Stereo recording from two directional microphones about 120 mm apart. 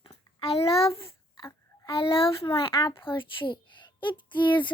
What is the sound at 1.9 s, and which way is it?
A child's voice, 50° left (ahead or behind).